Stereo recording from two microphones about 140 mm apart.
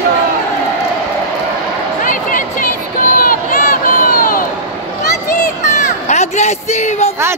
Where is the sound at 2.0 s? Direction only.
70° left (ahead or behind).